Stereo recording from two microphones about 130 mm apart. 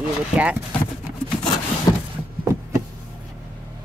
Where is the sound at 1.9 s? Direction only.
35° left (ahead or behind).